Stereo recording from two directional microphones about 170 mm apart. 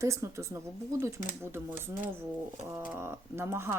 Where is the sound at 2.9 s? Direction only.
15° right (ahead or behind).